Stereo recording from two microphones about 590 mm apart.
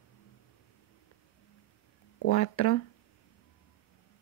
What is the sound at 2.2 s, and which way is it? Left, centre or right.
Speech, left.